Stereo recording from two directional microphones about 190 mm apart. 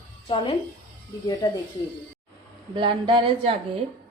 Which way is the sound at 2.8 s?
25° right (ahead or behind).